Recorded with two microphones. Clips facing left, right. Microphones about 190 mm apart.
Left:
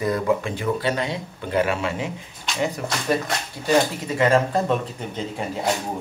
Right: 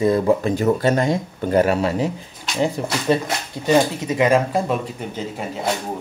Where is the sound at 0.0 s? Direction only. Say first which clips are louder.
Right 5 dB; 30° right (ahead or behind).